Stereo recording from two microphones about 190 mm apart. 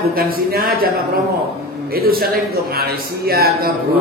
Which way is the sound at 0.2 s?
50° right (ahead or behind).